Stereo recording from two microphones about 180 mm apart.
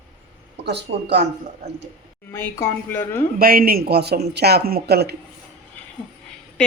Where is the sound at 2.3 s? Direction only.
15° left (ahead or behind).